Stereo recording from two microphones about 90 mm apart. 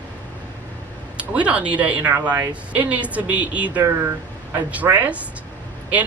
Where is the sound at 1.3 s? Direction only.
15° right (ahead or behind).